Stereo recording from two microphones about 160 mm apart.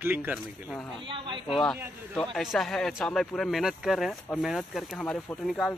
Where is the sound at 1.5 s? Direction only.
5° left (ahead or behind).